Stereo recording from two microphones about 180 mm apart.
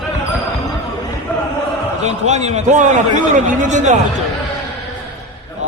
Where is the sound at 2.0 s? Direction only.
40° right (ahead or behind).